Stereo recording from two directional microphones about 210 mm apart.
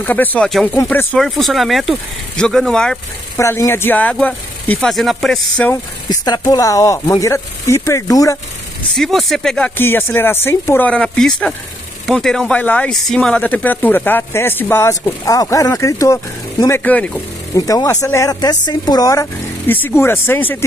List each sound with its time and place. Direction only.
0.0 s speech: 10° left (ahead or behind)
3.3 s speech: 15° left (ahead or behind)
6.0 s speech: 20° left (ahead or behind)
8.9 s speech: centre (ahead or behind)